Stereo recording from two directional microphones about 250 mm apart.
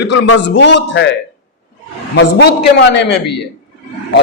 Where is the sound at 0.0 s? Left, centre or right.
Left.